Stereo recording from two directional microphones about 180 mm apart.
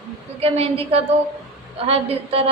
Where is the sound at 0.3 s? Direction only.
35° right (ahead or behind).